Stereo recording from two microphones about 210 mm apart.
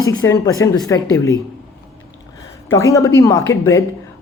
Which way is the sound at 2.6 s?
15° left (ahead or behind).